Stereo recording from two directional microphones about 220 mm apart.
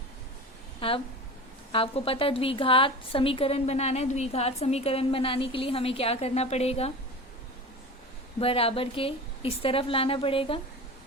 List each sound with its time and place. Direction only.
0.8 s a woman's voice: 25° left (ahead or behind)
8.4 s a woman's voice: 25° left (ahead or behind)